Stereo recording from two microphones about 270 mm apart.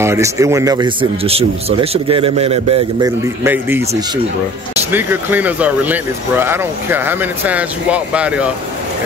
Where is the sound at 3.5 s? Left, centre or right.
Centre.